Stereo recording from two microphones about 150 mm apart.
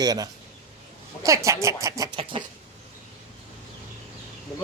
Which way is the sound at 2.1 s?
35° right (ahead or behind).